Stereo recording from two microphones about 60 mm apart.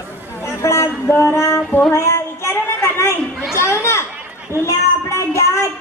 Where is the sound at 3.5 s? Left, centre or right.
Left.